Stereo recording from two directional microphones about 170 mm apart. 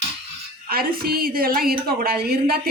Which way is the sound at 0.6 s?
60° right (ahead or behind).